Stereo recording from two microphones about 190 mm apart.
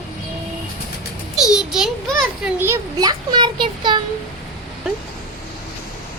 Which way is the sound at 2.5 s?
15° right (ahead or behind).